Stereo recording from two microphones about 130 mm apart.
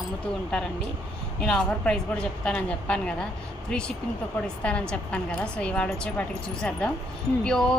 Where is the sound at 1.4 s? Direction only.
5° left (ahead or behind).